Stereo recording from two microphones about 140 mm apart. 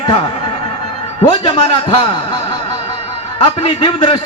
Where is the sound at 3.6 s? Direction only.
40° left (ahead or behind).